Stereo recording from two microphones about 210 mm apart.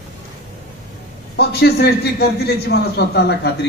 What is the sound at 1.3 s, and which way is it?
A man's voice, 50° left (ahead or behind).